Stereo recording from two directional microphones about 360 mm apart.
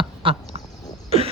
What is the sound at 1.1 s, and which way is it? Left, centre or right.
Cough, centre.